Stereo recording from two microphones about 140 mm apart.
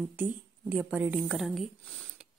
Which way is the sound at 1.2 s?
Centre (ahead or behind).